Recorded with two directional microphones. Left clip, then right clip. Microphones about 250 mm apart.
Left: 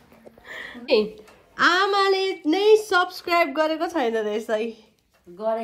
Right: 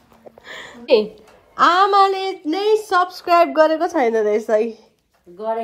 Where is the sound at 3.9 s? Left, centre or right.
Right.